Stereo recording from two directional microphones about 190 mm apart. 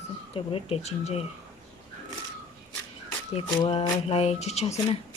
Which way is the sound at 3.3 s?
30° left (ahead or behind).